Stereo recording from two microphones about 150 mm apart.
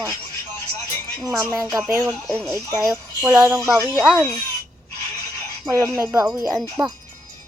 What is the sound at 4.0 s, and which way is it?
Speech, 5° left (ahead or behind).